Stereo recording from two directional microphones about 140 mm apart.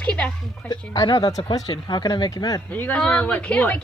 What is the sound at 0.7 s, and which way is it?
Speech, 30° left (ahead or behind).